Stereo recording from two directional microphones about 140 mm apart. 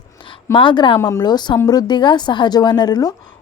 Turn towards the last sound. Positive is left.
turn(degrees=30)  # may be behind; listen again after turning